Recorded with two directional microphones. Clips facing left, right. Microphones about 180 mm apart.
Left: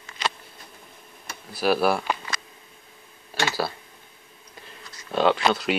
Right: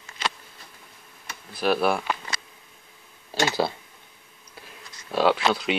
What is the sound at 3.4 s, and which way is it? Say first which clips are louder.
Speech: right 2 dB; 20° right (ahead or behind).